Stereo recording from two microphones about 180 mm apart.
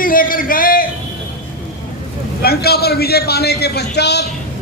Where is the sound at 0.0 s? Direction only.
50° left (ahead or behind).